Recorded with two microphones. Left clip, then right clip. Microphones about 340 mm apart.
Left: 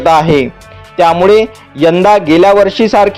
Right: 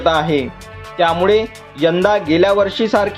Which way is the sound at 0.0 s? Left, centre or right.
Left.